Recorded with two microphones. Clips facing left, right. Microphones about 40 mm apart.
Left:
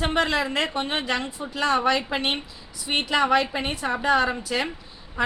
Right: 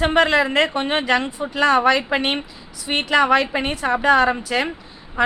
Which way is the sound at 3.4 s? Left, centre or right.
Right.